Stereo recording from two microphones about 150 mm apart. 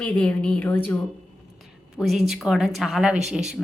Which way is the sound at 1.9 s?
Centre (ahead or behind).